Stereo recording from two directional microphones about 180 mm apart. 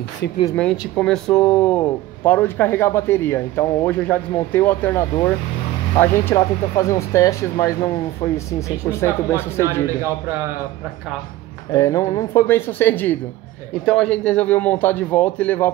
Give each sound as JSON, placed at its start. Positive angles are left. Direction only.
{"t": 0.6, "sound": "speech", "side_deg": 5}
{"t": 11.7, "sound": "speech", "side_deg": 15}